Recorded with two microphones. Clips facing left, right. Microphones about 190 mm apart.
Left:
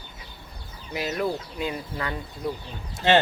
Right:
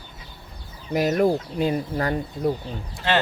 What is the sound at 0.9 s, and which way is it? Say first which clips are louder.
Speech: right 8 dB; 45° right (ahead or behind).